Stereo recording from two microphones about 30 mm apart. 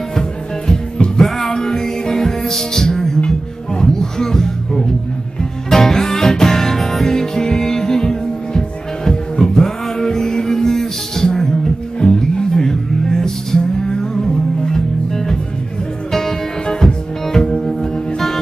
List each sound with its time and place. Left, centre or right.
0.1 s music: left